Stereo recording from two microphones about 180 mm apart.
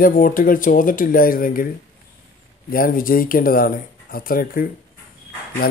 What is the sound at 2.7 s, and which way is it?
Speech, 50° left (ahead or behind).